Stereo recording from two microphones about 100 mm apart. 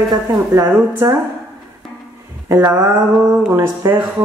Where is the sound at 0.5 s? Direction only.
30° right (ahead or behind).